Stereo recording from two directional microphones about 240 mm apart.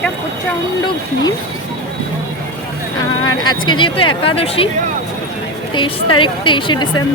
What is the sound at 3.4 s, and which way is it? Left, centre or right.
Speech, centre.